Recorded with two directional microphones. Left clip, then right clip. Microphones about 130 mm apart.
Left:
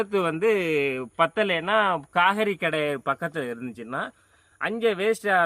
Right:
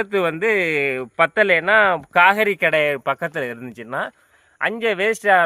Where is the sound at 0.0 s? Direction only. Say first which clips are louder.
Right 4 dB; 25° right (ahead or behind).